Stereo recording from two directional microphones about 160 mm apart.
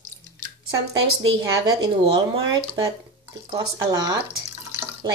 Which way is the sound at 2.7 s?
30° right (ahead or behind).